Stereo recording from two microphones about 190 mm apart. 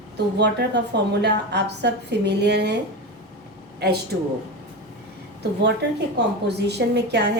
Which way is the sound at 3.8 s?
60° right (ahead or behind).